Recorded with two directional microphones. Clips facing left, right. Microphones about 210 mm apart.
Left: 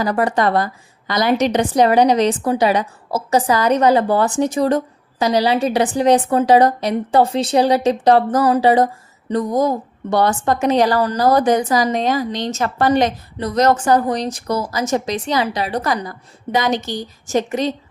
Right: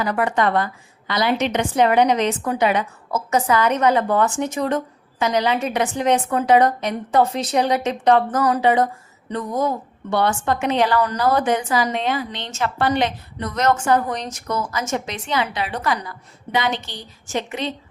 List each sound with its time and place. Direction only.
0.0 s a woman's voice: 35° left (ahead or behind)